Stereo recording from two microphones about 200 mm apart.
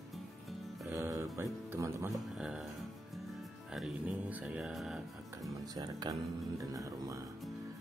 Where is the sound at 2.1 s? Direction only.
5° right (ahead or behind).